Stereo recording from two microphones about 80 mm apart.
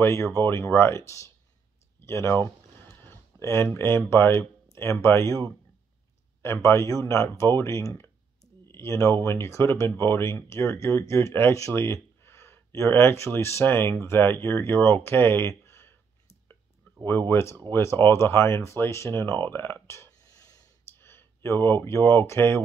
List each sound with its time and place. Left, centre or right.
0.0 s speech: left
2.0 s a sound: left
3.7 s speech: left
17.3 s speech: left
20.2 s a sound: left
21.0 s speech: left